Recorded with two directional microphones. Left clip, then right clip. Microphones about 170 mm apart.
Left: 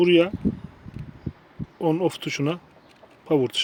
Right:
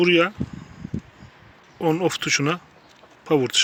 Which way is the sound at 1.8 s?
Centre (ahead or behind).